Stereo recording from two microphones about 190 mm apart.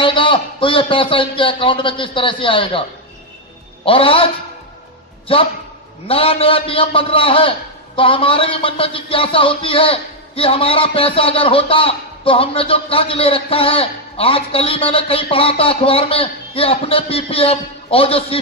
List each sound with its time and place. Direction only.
0.0 s a man's voice: 25° left (ahead or behind)
3.8 s a man's voice: 30° left (ahead or behind)
5.3 s a man's voice: 30° left (ahead or behind)